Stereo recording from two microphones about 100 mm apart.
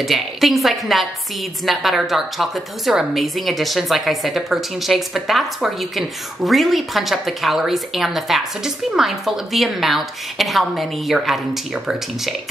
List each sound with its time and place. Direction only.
0.0 s a woman's voice: centre (ahead or behind)